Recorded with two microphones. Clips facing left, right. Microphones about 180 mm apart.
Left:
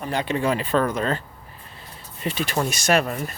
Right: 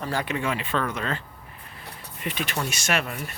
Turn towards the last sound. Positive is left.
turn(degrees=35)  # may be behind; listen again after turning